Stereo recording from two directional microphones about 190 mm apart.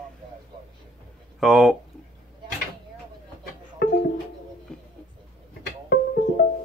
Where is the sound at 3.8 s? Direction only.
55° left (ahead or behind).